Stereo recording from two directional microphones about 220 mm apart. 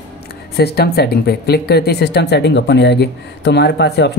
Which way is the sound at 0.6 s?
45° left (ahead or behind).